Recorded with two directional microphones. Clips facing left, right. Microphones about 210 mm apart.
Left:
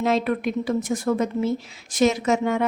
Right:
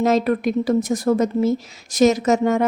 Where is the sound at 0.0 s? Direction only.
40° right (ahead or behind).